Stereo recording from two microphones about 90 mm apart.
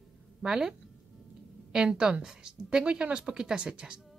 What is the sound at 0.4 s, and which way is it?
A woman's voice, 5° right (ahead or behind).